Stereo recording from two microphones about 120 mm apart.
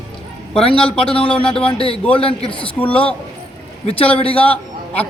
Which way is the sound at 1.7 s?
50° left (ahead or behind).